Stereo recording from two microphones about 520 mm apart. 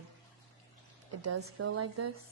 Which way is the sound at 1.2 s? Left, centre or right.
Right.